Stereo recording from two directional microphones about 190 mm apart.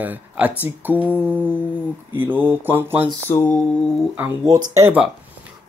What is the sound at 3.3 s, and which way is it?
Speech, 10° left (ahead or behind).